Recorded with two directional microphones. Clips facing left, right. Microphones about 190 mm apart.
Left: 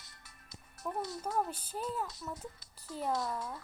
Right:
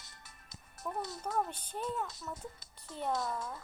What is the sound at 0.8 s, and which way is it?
Speech, 5° left (ahead or behind).